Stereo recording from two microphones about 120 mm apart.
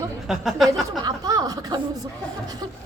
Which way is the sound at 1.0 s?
35° right (ahead or behind).